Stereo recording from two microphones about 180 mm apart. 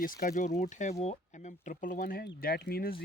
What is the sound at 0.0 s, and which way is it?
Speech, 45° left (ahead or behind).